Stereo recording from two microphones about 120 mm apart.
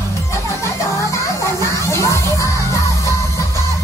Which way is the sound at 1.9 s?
25° left (ahead or behind).